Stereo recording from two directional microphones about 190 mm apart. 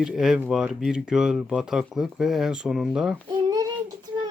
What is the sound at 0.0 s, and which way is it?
Speech, centre (ahead or behind).